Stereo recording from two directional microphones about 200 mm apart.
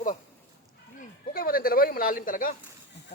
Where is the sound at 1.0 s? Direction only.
45° left (ahead or behind).